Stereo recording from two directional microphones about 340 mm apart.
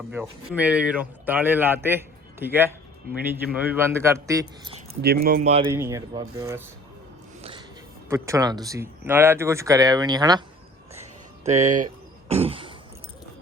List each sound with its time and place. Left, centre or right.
0.1 s speech: centre
5.0 s speech: right
5.6 s speech: centre
8.1 s speech: centre
11.4 s speech: right
12.3 s throat clearing: centre